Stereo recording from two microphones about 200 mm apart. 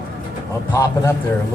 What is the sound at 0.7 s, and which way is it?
Speech, 15° left (ahead or behind).